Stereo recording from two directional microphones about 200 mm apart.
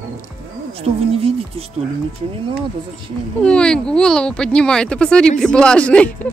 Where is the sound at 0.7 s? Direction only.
30° right (ahead or behind).